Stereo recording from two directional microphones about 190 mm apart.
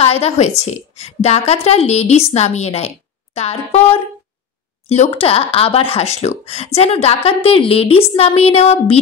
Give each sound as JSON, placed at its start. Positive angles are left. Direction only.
{"t": 0.0, "sound": "speech", "side_deg": 30}